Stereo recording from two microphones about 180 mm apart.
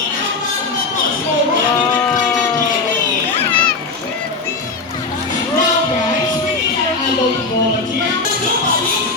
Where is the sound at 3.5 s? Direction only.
5° left (ahead or behind).